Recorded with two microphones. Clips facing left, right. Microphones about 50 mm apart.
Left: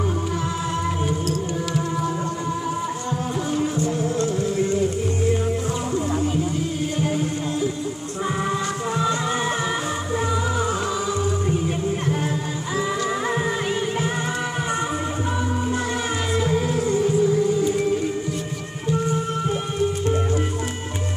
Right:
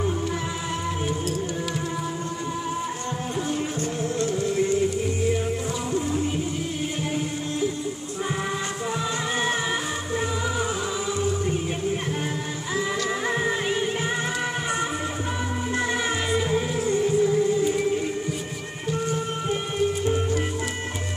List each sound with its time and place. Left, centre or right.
13.3 s music: centre
16.3 s music: centre